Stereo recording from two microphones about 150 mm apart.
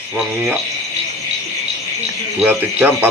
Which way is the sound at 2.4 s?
10° right (ahead or behind).